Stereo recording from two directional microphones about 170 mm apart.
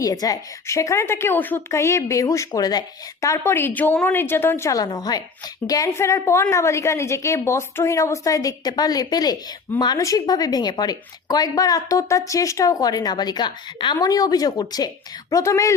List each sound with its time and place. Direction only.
0.0 s a woman's voice: 20° left (ahead or behind)